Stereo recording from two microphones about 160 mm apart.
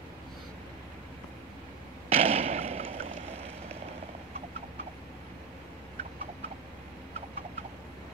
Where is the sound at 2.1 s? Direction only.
40° right (ahead or behind).